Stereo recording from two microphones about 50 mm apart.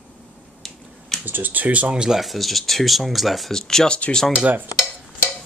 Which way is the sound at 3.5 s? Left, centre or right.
Centre.